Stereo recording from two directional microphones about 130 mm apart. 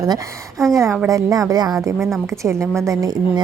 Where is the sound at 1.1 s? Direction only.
25° right (ahead or behind).